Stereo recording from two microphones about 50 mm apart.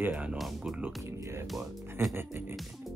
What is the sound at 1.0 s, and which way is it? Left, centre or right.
Music, right.